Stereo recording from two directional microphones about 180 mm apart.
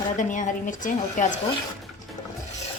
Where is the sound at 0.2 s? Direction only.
45° left (ahead or behind).